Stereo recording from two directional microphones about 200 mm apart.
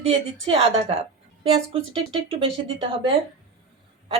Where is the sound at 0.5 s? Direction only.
30° right (ahead or behind).